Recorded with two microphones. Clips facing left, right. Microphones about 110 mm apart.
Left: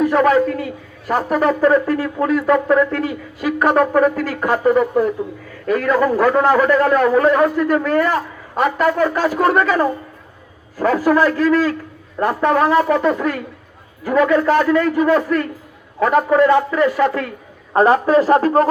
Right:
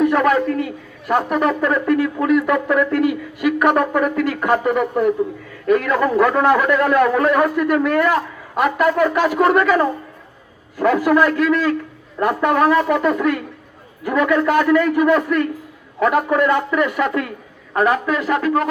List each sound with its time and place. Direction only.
0.0 s a man's voice: 30° left (ahead or behind)
10.8 s a man's voice: 35° left (ahead or behind)